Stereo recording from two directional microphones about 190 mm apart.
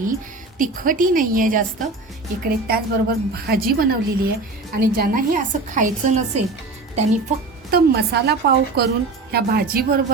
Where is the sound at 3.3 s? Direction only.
50° right (ahead or behind).